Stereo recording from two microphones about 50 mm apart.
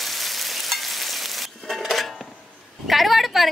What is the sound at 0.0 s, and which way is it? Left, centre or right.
Frying, centre.